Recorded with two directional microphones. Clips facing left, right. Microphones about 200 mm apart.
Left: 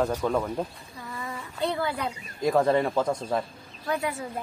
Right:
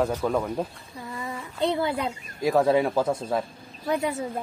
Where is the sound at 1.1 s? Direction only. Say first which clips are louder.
Right 2 dB; 20° right (ahead or behind).